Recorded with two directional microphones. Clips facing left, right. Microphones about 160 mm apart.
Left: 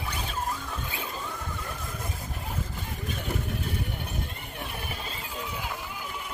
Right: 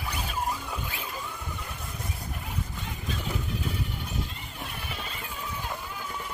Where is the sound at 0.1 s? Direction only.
10° right (ahead or behind).